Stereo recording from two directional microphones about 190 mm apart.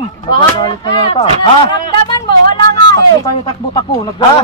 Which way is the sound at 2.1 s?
25° left (ahead or behind).